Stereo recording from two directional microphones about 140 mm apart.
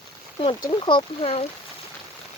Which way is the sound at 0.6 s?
35° left (ahead or behind).